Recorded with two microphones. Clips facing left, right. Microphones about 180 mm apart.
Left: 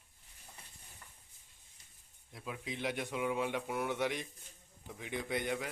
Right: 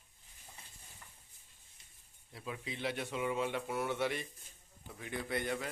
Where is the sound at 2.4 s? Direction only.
10° left (ahead or behind).